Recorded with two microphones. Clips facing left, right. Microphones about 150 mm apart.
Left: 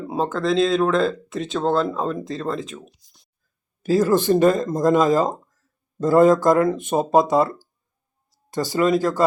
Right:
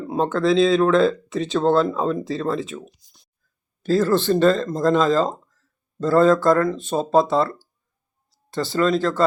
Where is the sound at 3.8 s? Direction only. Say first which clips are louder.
Left 1 dB; 10° left (ahead or behind).